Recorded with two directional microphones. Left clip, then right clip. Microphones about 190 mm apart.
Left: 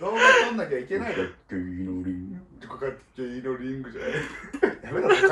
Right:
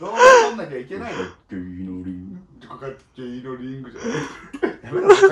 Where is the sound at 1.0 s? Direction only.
35° right (ahead or behind).